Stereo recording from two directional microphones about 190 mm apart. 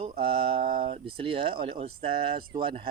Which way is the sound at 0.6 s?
50° right (ahead or behind).